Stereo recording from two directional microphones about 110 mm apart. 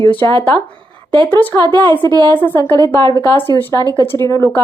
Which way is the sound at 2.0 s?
40° right (ahead or behind).